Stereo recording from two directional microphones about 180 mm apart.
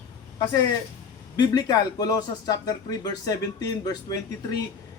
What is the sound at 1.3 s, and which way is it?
Speech, 20° left (ahead or behind).